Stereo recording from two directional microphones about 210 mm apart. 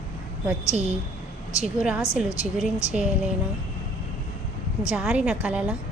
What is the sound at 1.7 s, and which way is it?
Speech, 5° right (ahead or behind).